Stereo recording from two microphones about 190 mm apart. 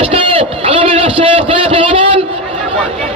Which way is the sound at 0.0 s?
30° right (ahead or behind).